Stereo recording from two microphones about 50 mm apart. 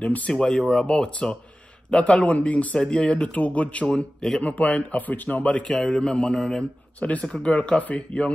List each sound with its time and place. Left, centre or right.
0.0 s speech: left
0.3 s speech: centre
7.0 s speech: left
7.2 s speech: centre
7.5 s speech: left